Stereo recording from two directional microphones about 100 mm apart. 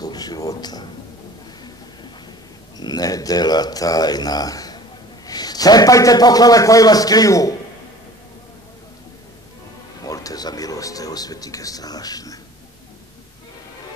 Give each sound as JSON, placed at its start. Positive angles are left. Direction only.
{"t": 0.0, "sound": "a man's voice", "side_deg": 40}
{"t": 2.8, "sound": "speech", "side_deg": 40}
{"t": 10.0, "sound": "speech", "side_deg": 35}